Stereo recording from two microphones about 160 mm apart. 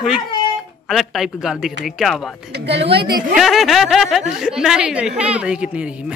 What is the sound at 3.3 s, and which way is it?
Speech, centre (ahead or behind).